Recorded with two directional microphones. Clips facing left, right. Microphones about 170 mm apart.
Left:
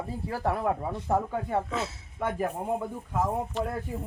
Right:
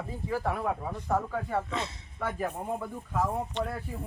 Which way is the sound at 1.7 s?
5° left (ahead or behind).